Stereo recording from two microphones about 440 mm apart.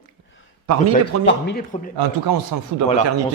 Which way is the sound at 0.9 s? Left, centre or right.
Left.